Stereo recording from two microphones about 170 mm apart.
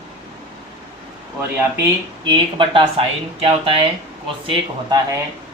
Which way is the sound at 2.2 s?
30° right (ahead or behind).